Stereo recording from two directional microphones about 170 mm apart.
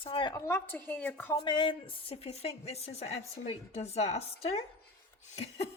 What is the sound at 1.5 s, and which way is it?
A woman's voice, 30° left (ahead or behind).